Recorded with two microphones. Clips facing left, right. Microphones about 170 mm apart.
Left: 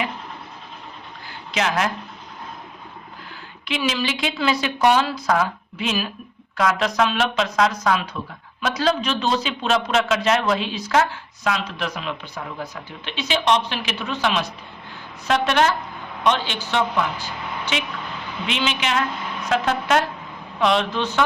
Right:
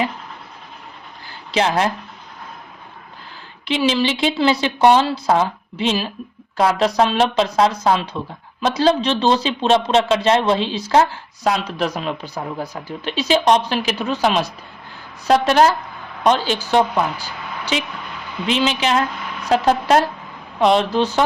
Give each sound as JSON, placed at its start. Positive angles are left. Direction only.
{"t": 1.5, "sound": "a man's voice", "side_deg": -30}
{"t": 3.7, "sound": "a man's voice", "side_deg": -30}